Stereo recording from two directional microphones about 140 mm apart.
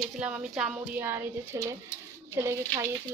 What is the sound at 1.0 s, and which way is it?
Speech, 20° right (ahead or behind).